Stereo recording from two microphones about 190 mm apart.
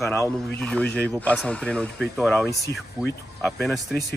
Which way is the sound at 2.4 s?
15° left (ahead or behind).